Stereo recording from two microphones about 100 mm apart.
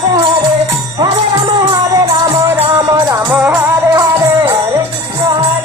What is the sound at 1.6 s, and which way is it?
Music, 35° right (ahead or behind).